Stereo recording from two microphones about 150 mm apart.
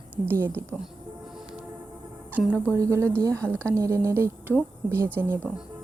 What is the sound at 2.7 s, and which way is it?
A woman's voice, 20° right (ahead or behind).